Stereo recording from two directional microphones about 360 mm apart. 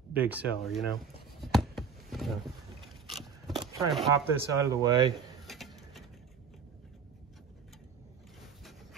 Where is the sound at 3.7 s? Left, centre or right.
Centre.